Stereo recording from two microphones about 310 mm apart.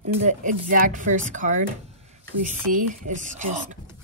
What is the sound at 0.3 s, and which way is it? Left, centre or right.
A woman's voice, right.